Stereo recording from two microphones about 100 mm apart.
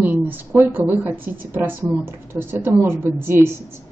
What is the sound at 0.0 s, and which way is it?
A woman's voice, 20° right (ahead or behind).